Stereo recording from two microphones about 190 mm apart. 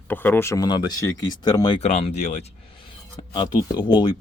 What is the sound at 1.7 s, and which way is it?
Speech, 35° left (ahead or behind).